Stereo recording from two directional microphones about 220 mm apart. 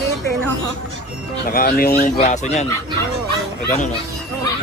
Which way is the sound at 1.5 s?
45° left (ahead or behind).